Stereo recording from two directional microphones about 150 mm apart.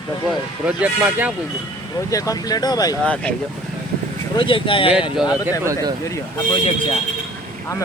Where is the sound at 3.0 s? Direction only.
10° left (ahead or behind).